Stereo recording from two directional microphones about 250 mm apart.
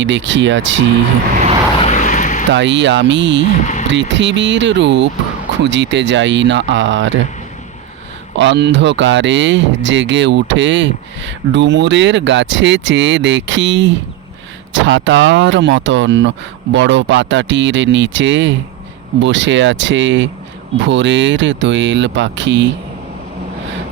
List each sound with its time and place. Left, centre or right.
0.0 s speech: right
1.8 s vehicle: left
2.5 s speech: right
3.4 s speech: left
4.1 s speech: right
8.4 s speech: right